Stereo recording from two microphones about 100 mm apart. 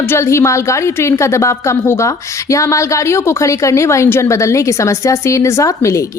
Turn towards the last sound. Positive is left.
turn(degrees=30)  # may be behind; listen again after turning